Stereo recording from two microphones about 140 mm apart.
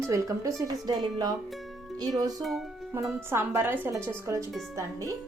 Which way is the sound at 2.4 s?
Centre (ahead or behind).